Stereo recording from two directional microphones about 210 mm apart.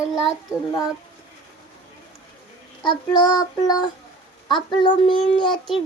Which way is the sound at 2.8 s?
20° left (ahead or behind).